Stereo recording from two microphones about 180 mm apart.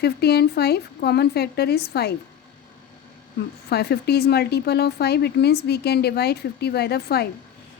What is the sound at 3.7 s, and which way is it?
Speech, 65° left (ahead or behind).